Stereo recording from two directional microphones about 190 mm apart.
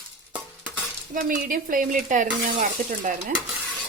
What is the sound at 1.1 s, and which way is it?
Speech, 45° right (ahead or behind).